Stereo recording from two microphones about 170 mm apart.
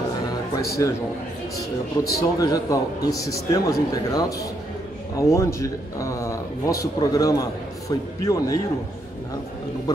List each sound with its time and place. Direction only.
0.6 s a man's voice: 20° left (ahead or behind)
2.0 s a man's voice: 20° left (ahead or behind)
9.9 s speech: 20° left (ahead or behind)